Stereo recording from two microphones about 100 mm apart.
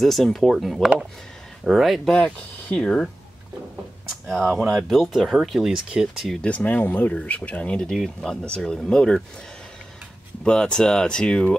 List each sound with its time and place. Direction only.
0.0 s speech: centre (ahead or behind)
2.1 s speech: 10° left (ahead or behind)
4.3 s speech: 5° left (ahead or behind)
6.4 s speech: 15° left (ahead or behind)
10.4 s speech: 10° left (ahead or behind)